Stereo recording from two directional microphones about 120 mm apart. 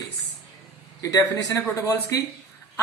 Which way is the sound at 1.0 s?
30° left (ahead or behind).